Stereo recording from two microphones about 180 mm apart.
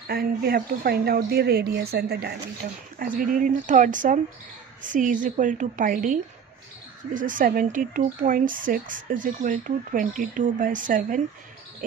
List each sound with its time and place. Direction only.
0.1 s speech: 55° right (ahead or behind)
3.0 s speech: 50° right (ahead or behind)
7.2 s speech: 50° right (ahead or behind)